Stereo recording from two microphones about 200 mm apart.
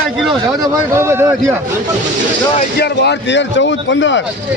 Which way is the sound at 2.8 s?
55° left (ahead or behind).